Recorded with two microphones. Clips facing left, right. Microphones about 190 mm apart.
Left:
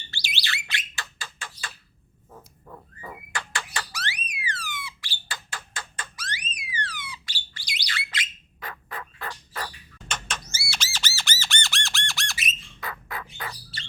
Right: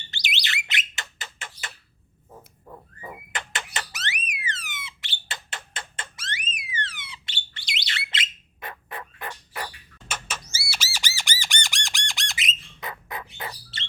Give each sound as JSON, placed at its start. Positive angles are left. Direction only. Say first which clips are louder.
{"t": 0.1, "sound": "alarm", "louder": "right 2 dB", "side_deg": -20}
{"t": 2.3, "sound": "a sound", "louder": "right 1 dB", "side_deg": -15}
{"t": 5.3, "sound": "fire alarm", "louder": "even", "side_deg": -25}